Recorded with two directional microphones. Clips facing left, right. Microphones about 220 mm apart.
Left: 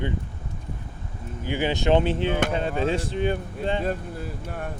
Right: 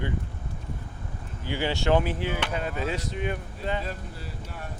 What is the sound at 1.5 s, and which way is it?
Speech, 15° left (ahead or behind).